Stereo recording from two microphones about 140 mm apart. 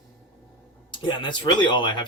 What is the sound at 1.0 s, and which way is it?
Speech, 35° left (ahead or behind).